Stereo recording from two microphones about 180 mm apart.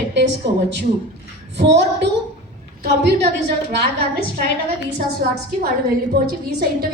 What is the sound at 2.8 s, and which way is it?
A woman's voice, 65° right (ahead or behind).